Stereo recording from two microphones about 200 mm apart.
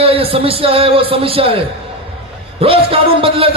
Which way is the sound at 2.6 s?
25° right (ahead or behind).